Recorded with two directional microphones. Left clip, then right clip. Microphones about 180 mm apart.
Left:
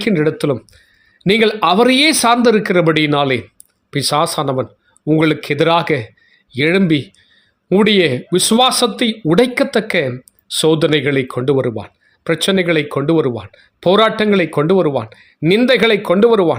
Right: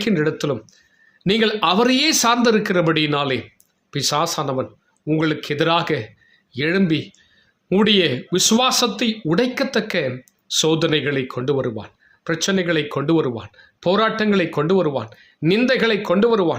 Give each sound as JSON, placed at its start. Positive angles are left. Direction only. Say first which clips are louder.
{"t": 0.0, "sound": "speech", "louder": "left 5 dB", "side_deg": 30}